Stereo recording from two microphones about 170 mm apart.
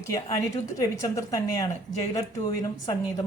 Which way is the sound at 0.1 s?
20° left (ahead or behind).